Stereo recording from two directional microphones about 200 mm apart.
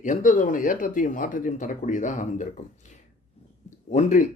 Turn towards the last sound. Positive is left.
turn(degrees=40)  # may be behind; listen again after turning